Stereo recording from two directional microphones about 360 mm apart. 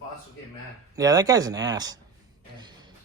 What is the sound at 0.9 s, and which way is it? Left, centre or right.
Speech, centre.